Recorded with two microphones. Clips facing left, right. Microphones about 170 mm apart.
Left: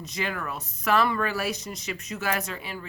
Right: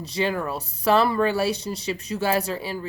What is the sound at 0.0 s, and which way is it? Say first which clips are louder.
Speech: right 7 dB; 30° right (ahead or behind).